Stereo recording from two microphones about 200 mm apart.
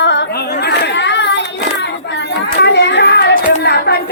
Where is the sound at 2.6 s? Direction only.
60° left (ahead or behind).